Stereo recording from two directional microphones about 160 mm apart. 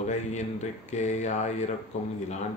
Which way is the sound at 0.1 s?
45° left (ahead or behind).